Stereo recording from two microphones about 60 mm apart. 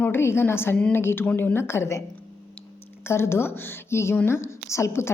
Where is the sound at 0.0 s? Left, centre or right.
Left.